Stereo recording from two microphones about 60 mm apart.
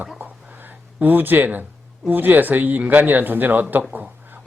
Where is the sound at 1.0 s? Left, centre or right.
Right.